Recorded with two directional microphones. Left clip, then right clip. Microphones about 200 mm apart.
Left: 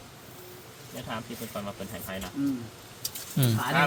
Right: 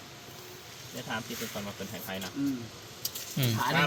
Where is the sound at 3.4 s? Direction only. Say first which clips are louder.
Left 3 dB; 30° left (ahead or behind).